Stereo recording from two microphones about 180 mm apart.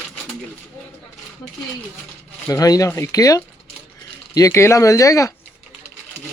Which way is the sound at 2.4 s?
20° left (ahead or behind).